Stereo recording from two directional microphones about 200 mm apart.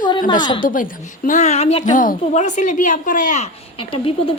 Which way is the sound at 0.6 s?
40° left (ahead or behind).